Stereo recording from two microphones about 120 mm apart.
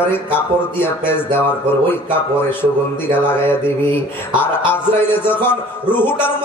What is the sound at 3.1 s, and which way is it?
A man's voice, 20° left (ahead or behind).